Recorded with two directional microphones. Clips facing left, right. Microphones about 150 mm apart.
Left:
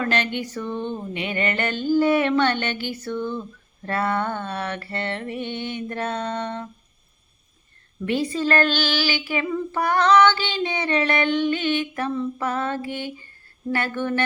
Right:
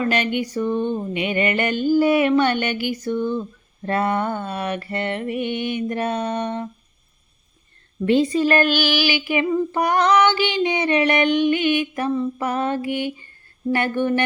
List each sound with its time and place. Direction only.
0.0 s female singing: 15° right (ahead or behind)
8.0 s female singing: 25° right (ahead or behind)